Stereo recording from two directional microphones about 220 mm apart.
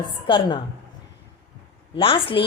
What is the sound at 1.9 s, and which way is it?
Speech, 25° left (ahead or behind).